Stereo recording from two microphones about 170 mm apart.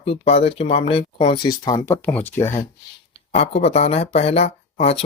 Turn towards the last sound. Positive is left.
turn(degrees=40)  # may be behind; listen again after turning